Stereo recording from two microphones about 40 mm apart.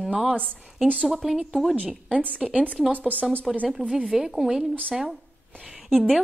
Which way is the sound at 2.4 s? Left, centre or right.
Right.